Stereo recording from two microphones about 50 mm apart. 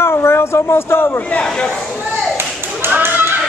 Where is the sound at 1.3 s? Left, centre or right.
Left.